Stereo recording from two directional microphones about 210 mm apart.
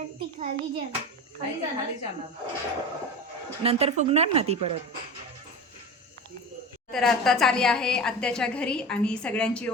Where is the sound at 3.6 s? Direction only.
30° right (ahead or behind).